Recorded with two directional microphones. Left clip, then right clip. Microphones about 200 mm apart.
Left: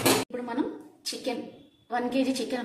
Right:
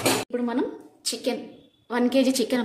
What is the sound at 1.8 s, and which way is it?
Speech, 60° right (ahead or behind).